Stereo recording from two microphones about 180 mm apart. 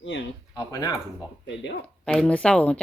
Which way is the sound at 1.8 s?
5° left (ahead or behind).